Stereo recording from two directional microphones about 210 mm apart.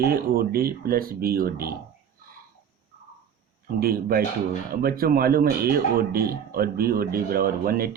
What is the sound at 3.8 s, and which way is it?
Speech, 45° right (ahead or behind).